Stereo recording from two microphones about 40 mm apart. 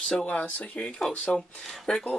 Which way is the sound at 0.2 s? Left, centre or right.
Left.